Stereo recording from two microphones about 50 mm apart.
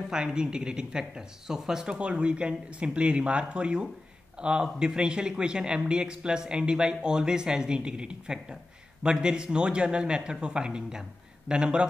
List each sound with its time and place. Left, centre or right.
0.1 s speech: centre
2.0 s speech: right